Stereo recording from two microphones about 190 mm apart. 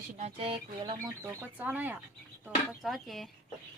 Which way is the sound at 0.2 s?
30° right (ahead or behind).